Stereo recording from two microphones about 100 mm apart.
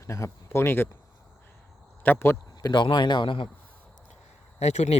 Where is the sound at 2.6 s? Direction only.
45° left (ahead or behind).